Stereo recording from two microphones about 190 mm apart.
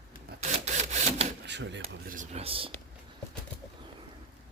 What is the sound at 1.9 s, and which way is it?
Speech, 45° right (ahead or behind).